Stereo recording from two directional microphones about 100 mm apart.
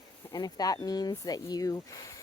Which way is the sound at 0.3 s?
40° left (ahead or behind).